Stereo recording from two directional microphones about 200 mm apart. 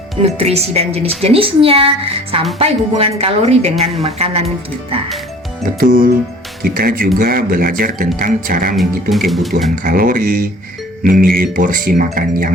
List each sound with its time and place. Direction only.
0.2 s a woman's voice: 30° right (ahead or behind)
5.8 s speech: 45° right (ahead or behind)
8.7 s speech: centre (ahead or behind)
9.7 s speech: 45° right (ahead or behind)